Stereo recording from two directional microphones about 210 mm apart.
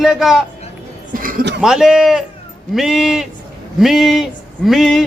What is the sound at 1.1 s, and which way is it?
Speech, 40° right (ahead or behind).